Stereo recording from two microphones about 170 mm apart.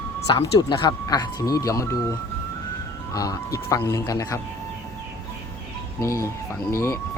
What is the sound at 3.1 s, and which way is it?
Speech, 20° left (ahead or behind).